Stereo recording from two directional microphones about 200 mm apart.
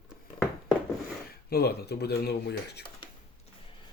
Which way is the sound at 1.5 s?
55° left (ahead or behind).